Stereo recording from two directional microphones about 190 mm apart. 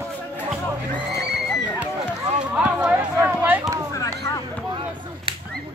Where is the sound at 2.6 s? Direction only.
5° right (ahead or behind).